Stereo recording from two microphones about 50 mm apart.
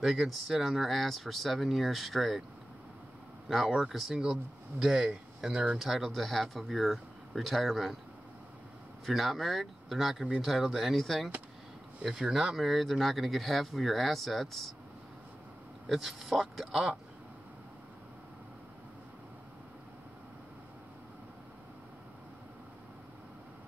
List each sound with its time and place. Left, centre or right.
0.0 s speech: centre
3.4 s speech: centre
4.2 s speech: centre
5.8 s speech: centre
9.0 s speech: centre
12.0 s speech: centre
15.9 s speech: centre